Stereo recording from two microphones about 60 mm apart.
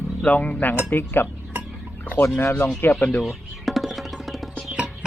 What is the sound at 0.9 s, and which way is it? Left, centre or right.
Speech, left.